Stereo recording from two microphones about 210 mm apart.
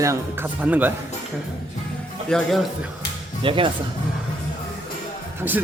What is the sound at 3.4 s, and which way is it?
Speech, 25° right (ahead or behind).